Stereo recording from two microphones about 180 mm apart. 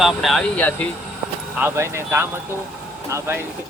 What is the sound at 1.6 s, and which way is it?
Speech, 15° right (ahead or behind).